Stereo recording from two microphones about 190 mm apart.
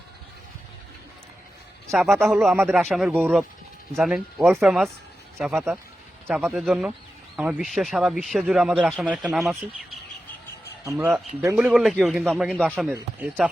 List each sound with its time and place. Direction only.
1.9 s a man's voice: centre (ahead or behind)
5.5 s speech: 10° right (ahead or behind)
10.8 s speech: 15° right (ahead or behind)